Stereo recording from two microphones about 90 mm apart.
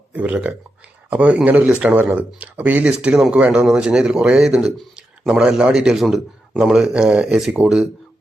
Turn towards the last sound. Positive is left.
turn(degrees=-5)  # may be behind; listen again after turning